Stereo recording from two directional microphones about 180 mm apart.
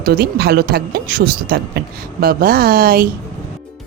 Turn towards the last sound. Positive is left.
turn(degrees=-55)  # may be behind; listen again after turning